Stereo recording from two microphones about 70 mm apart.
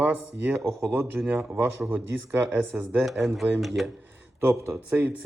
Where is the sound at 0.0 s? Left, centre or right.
Right.